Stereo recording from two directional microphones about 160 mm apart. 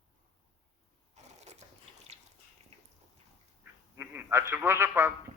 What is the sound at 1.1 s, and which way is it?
Crushing, 45° right (ahead or behind).